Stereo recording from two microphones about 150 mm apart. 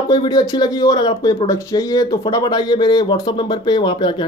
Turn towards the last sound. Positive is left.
turn(degrees=30)  # may be behind; listen again after turning